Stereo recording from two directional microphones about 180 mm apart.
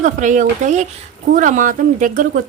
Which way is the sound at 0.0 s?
45° right (ahead or behind).